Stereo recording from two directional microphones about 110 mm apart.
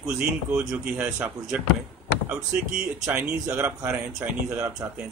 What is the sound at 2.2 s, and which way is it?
Speech, 15° right (ahead or behind).